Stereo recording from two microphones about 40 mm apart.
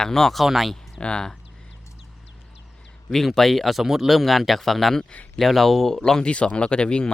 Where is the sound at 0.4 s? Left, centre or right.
Centre.